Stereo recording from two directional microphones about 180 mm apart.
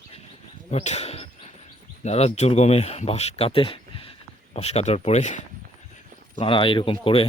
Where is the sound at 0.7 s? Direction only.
35° left (ahead or behind).